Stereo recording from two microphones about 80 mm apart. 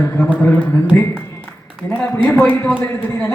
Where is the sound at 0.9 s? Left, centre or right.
Left.